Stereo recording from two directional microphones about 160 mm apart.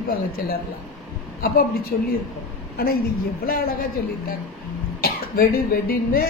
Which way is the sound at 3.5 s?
70° left (ahead or behind).